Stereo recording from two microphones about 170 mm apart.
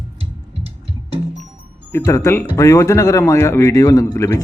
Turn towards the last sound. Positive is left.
turn(degrees=15)  # may be behind; listen again after turning